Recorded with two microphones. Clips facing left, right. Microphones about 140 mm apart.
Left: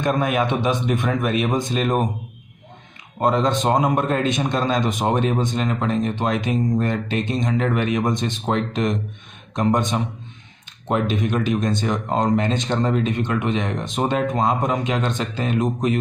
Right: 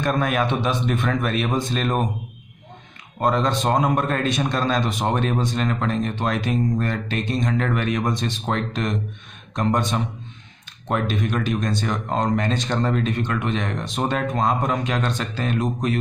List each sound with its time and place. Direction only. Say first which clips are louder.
0.0 s speech: left 1 dB; 15° left (ahead or behind)
3.2 s a man's voice: left 2 dB; 20° left (ahead or behind)